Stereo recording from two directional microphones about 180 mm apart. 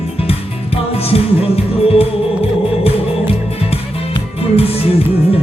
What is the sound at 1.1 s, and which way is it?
Music, 35° left (ahead or behind).